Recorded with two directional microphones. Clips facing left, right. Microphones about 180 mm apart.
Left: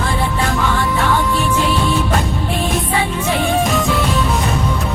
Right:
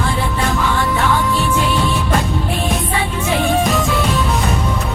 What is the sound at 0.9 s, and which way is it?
Music, centre (ahead or behind).